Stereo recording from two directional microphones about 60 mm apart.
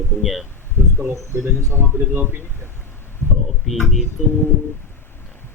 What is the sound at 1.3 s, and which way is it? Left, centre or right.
Speech, right.